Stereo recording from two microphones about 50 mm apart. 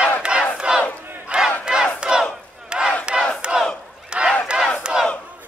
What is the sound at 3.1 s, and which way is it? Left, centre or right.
Crowd, centre.